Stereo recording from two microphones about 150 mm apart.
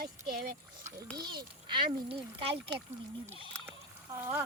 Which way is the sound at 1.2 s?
30° right (ahead or behind).